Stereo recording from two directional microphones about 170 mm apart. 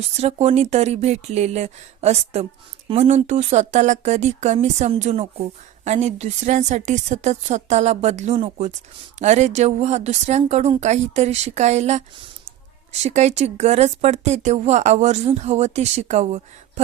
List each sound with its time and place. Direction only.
0.2 s speech: 40° right (ahead or behind)